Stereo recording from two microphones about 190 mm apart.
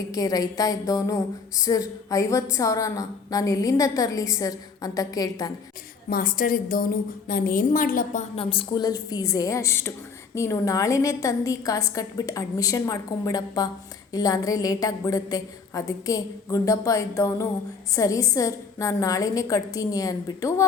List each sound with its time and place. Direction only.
0.1 s a woman's voice: 20° left (ahead or behind)
6.1 s a woman's voice: 50° left (ahead or behind)
8.4 s a woman's voice: 30° left (ahead or behind)